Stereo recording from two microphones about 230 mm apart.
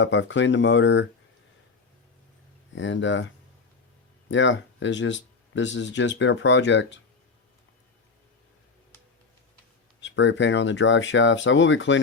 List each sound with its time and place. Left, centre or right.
0.0 s speech: left
2.7 s speech: left
10.0 s speech: left